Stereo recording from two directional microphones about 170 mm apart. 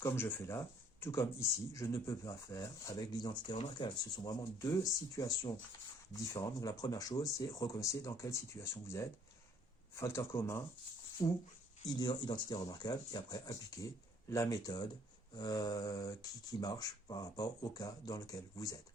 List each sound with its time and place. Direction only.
0.0 s speech: 15° left (ahead or behind)